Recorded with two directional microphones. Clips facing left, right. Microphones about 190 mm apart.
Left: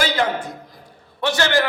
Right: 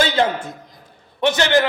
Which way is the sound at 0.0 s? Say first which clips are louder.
Right 3 dB; 25° right (ahead or behind).